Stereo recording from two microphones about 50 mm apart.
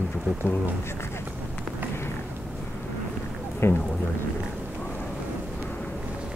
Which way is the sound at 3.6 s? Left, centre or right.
Left.